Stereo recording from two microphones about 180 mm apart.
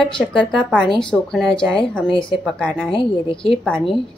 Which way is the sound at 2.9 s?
30° left (ahead or behind).